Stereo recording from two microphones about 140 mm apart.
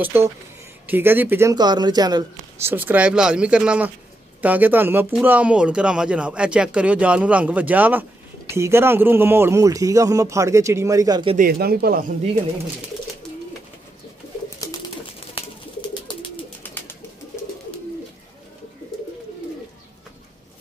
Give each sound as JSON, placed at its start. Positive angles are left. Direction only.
{"t": 0.0, "sound": "speech", "side_deg": -15}
{"t": 2.6, "sound": "speech", "side_deg": -15}
{"t": 11.3, "sound": "speech", "side_deg": -90}
{"t": 14.6, "sound": "bird", "side_deg": 25}
{"t": 15.9, "sound": "bird", "side_deg": 35}
{"t": 16.6, "sound": "bird", "side_deg": 15}